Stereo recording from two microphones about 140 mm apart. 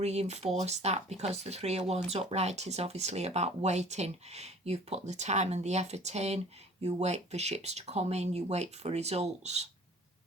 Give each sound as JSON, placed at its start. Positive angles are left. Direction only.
{"t": 0.0, "sound": "speech", "side_deg": -50}